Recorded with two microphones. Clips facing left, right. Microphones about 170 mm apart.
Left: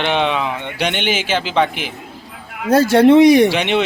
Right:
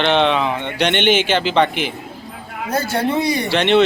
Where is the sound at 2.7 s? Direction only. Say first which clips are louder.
Left 10 dB; 90° left.